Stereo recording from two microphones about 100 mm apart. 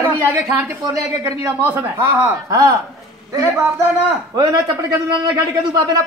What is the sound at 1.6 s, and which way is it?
Speech, 25° right (ahead or behind).